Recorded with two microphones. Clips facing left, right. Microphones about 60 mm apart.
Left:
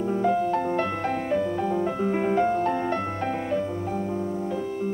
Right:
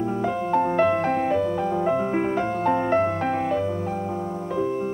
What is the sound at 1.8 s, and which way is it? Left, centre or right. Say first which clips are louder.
Music: right 3 dB; right.